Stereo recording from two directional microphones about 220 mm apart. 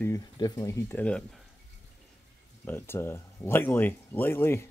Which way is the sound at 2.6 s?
10° left (ahead or behind).